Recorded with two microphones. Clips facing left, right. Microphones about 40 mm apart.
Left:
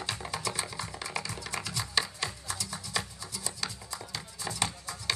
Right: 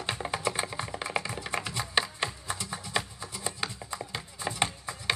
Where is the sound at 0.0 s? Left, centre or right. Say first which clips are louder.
Right 4 dB; right.